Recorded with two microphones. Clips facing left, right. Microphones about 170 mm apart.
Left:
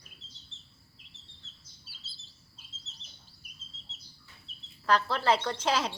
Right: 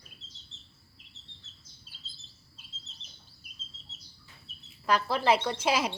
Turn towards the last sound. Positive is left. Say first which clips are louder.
# right 1 dB
turn(degrees=-10)  # may be behind; listen again after turning